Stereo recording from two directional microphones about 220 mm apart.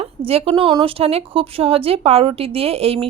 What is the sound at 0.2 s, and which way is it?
A woman's voice, 25° right (ahead or behind).